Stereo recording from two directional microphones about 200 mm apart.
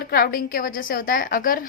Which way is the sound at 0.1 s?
45° left (ahead or behind).